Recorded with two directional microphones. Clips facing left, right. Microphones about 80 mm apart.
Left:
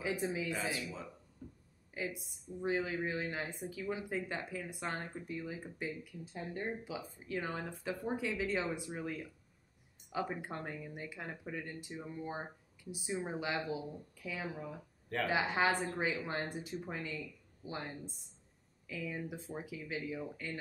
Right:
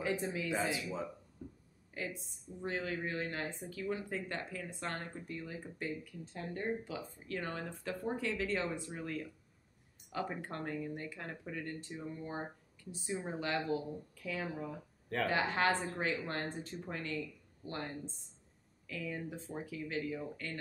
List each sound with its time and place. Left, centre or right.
0.0 s speech: centre
0.5 s speech: right
1.9 s speech: centre
15.2 s speech: centre
15.8 s a woman's voice: centre
16.1 s speech: centre